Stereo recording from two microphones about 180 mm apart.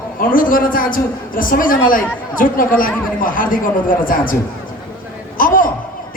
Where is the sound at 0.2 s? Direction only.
50° left (ahead or behind).